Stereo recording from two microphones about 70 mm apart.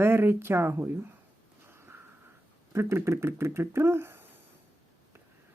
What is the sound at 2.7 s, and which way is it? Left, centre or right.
Speech, right.